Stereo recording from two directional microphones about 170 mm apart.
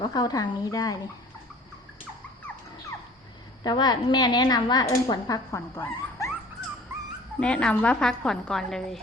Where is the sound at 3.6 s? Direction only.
25° left (ahead or behind).